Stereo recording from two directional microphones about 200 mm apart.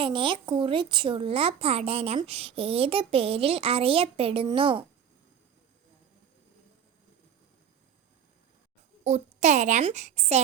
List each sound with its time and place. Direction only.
0.0 s speech: 25° right (ahead or behind)
9.0 s a child's voice: 35° right (ahead or behind)